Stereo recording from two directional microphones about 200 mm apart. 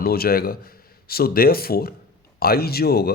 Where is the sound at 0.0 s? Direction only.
50° left (ahead or behind).